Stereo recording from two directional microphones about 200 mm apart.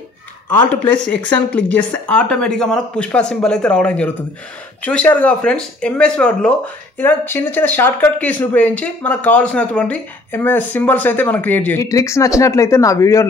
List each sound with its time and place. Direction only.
1.0 s speech: 5° left (ahead or behind)